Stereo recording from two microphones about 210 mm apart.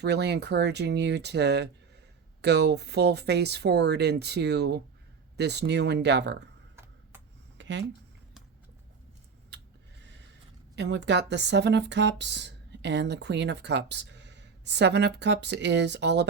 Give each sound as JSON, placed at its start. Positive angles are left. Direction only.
{"t": 0.0, "sound": "speech", "side_deg": -55}
{"t": 7.6, "sound": "speech", "side_deg": -60}
{"t": 10.8, "sound": "speech", "side_deg": -55}